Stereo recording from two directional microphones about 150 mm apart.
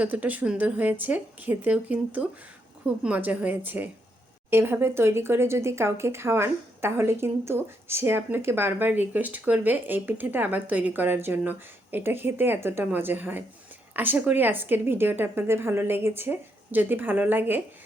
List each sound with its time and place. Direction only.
0.0 s speech: 10° right (ahead or behind)